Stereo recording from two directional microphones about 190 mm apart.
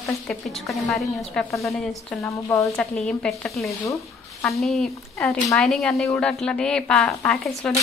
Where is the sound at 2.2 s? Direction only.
15° left (ahead or behind).